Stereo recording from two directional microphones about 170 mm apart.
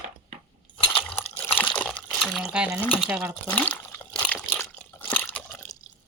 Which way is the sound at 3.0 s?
10° right (ahead or behind).